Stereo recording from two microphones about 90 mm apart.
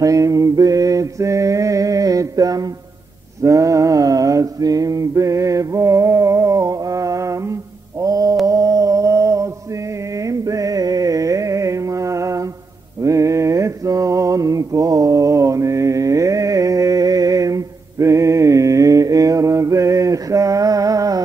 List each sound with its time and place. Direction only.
0.0 s mantra: 40° right (ahead or behind)
3.4 s male singing: 35° right (ahead or behind)
8.0 s mantra: 40° right (ahead or behind)
10.2 s a sound: 40° right (ahead or behind)
13.0 s mantra: 35° right (ahead or behind)